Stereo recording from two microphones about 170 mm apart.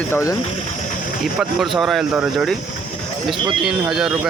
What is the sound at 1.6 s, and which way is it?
Speech, centre (ahead or behind).